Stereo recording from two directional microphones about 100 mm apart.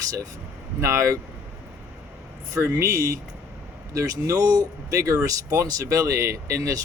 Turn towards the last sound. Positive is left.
turn(degrees=-30)  # may be behind; listen again after turning